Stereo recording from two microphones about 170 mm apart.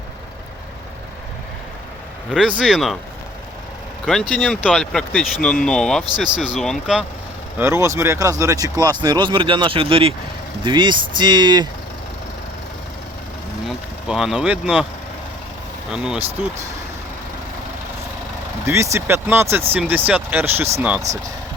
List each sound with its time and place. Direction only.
2.3 s speech: centre (ahead or behind)
4.0 s speech: 5° left (ahead or behind)
7.6 s speech: 15° right (ahead or behind)
13.7 s speech: 5° right (ahead or behind)
15.9 s speech: 5° right (ahead or behind)
18.6 s speech: 15° right (ahead or behind)